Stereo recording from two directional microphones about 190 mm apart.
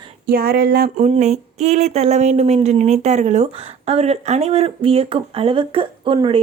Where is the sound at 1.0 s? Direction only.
40° right (ahead or behind).